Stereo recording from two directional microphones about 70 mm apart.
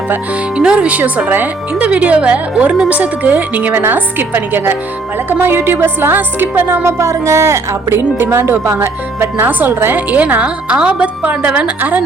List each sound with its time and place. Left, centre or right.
0.5 s a woman's voice: centre; by 6.8 s right
6.8 s speech: right